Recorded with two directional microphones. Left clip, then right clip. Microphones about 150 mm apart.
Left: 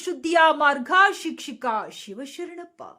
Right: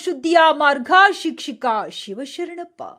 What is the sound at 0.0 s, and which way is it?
Speech, 20° right (ahead or behind).